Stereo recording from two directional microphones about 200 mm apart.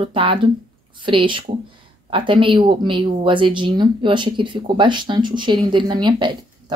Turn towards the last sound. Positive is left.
turn(degrees=-25)  # may be behind; listen again after turning